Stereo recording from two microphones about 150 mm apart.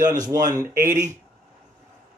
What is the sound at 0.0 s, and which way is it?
Speech, 55° right (ahead or behind).